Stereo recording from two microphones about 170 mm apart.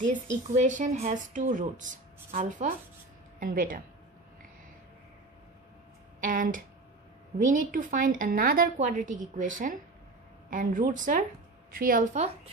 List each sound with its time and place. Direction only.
0.6 s a woman's voice: 45° right (ahead or behind)
6.2 s a woman's voice: 50° right (ahead or behind)